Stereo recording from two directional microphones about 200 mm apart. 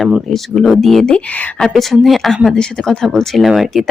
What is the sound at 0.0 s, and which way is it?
Speech, centre (ahead or behind).